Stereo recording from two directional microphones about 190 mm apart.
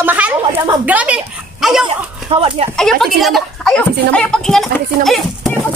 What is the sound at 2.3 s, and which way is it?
Speech, 30° right (ahead or behind).